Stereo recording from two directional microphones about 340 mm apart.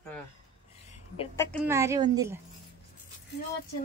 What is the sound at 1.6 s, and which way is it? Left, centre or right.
Speech, centre.